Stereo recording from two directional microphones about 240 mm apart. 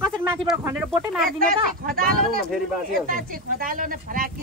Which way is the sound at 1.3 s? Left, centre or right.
Right.